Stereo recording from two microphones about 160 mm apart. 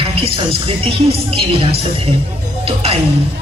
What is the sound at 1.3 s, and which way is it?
Speech, 35° right (ahead or behind).